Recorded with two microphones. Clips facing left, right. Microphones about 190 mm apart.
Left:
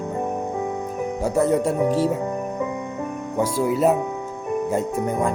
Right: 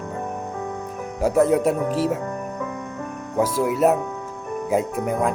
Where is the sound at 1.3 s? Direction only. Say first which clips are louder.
Right 3 dB; 90° right.